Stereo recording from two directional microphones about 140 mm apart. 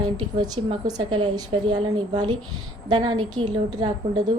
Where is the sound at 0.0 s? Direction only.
30° right (ahead or behind).